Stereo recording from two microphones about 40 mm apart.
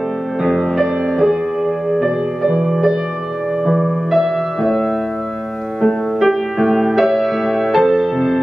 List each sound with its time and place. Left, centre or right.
0.4 s music: centre
2.5 s music: centre
4.1 s music: centre
6.1 s music: centre